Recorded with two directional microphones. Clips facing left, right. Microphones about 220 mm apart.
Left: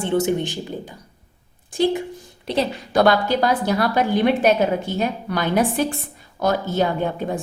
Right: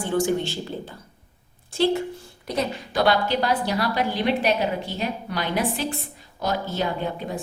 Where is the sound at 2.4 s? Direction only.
30° left (ahead or behind).